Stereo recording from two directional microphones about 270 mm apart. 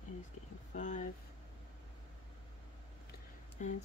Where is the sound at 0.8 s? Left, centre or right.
Left.